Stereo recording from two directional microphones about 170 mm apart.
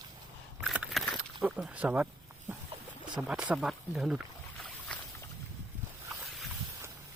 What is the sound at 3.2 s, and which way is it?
Speech, 5° right (ahead or behind).